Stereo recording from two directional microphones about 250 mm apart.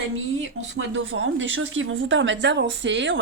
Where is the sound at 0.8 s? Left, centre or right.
Right.